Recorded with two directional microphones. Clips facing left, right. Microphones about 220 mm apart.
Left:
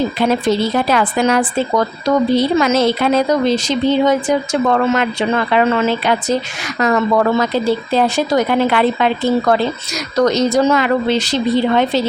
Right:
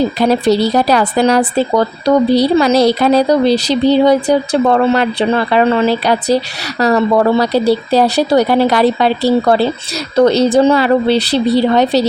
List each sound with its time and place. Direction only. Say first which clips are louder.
0.2 s speech: right 3 dB; 35° right (ahead or behind)